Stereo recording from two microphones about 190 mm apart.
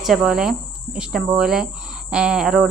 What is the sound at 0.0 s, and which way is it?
Speech, centre (ahead or behind).